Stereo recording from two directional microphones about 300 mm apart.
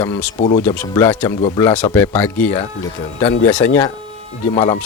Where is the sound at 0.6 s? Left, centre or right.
Centre.